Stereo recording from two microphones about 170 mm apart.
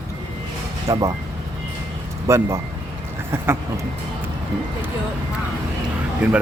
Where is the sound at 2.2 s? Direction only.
15° right (ahead or behind).